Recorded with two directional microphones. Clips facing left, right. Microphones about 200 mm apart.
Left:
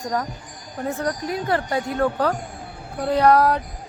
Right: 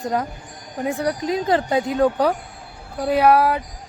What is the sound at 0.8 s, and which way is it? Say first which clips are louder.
Speech: right 3 dB; 15° right (ahead or behind).